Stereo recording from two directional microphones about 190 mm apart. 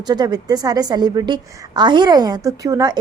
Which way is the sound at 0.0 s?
20° right (ahead or behind).